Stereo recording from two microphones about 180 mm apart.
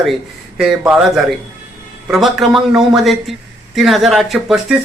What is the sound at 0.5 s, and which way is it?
Speech, 5° right (ahead or behind).